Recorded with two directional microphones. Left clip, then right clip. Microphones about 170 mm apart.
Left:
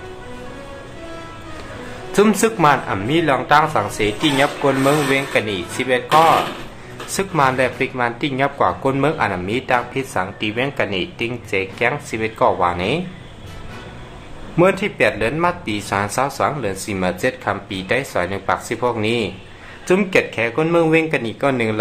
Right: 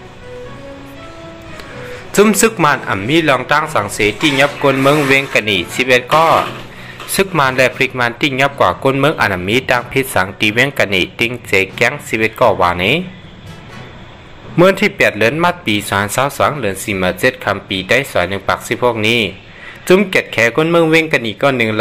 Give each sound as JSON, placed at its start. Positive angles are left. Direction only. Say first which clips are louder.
{"t": 2.1, "sound": "a man's voice", "louder": "right 4 dB", "side_deg": -15}
{"t": 14.6, "sound": "speech", "louder": "right 5 dB", "side_deg": -30}